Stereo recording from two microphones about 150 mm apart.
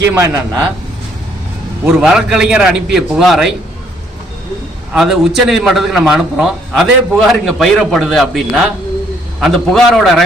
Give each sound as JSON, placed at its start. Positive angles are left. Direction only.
{"t": 0.1, "sound": "a man's voice", "side_deg": -20}
{"t": 1.8, "sound": "a man's voice", "side_deg": -5}
{"t": 4.9, "sound": "a man's voice", "side_deg": 0}